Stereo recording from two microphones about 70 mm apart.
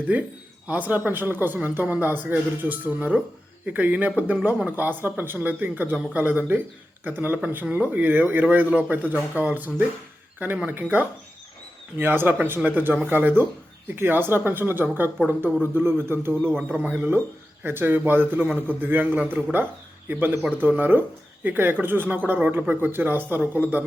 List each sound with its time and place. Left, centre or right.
0.1 s speech: right
16.3 s speech: centre
16.9 s speech: right